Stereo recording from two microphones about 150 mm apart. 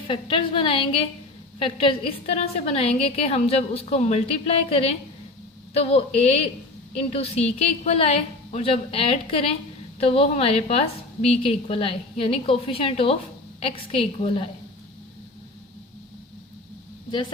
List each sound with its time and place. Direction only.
0.1 s a woman's voice: 35° left (ahead or behind)
17.1 s speech: 30° left (ahead or behind)